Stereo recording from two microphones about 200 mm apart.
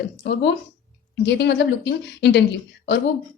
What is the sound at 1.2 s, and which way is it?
A woman's voice, 60° left (ahead or behind).